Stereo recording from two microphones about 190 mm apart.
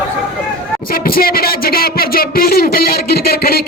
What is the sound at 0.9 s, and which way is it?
A man's voice, 50° left (ahead or behind).